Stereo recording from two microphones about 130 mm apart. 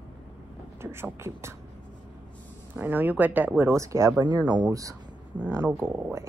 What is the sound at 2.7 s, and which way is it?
Speech, 15° right (ahead or behind).